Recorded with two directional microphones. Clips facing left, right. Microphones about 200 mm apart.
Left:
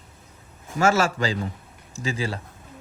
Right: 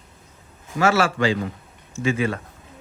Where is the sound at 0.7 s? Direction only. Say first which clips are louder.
Right 1 dB; 45° left (ahead or behind).